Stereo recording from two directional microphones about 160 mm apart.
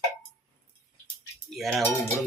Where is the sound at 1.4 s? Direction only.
Centre (ahead or behind).